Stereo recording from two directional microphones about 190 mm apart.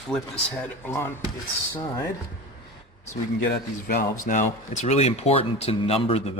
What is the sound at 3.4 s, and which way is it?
Speech, 55° left (ahead or behind).